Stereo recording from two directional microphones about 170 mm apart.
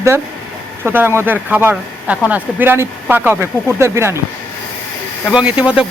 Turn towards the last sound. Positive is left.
turn(degrees=-5)  # may be behind; listen again after turning